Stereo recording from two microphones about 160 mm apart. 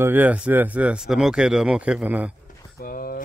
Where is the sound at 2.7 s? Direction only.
65° left (ahead or behind).